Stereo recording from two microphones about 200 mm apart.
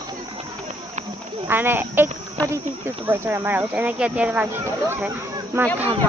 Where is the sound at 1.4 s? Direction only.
10° right (ahead or behind).